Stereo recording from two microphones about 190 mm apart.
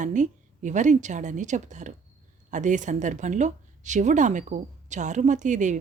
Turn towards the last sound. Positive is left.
turn(degrees=-40)  # may be behind; listen again after turning